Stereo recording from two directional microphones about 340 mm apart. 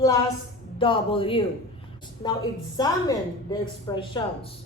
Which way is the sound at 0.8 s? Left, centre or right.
Centre.